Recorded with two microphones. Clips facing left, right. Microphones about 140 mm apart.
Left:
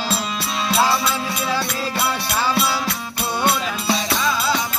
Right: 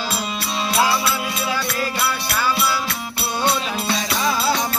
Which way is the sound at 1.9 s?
20° left (ahead or behind).